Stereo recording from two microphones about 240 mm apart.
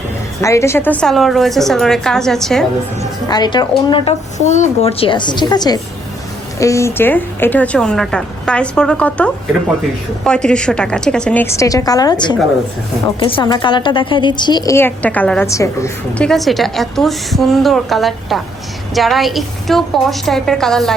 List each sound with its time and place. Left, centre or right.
0.4 s a woman's voice: centre
3.2 s a woman's voice: centre